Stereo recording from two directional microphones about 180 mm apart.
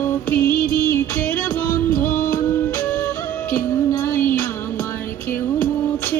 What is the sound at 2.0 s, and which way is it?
Music, 50° left (ahead or behind).